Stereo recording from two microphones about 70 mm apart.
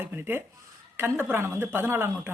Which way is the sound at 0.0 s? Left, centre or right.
Right.